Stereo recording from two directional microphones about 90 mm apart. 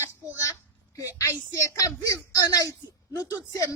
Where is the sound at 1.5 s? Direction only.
35° left (ahead or behind).